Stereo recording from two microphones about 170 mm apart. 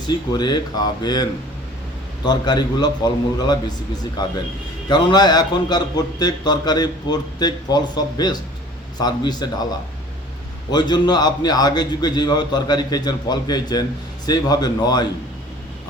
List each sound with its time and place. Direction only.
0.1 s a man's voice: 25° left (ahead or behind)
10.7 s a man's voice: 25° left (ahead or behind)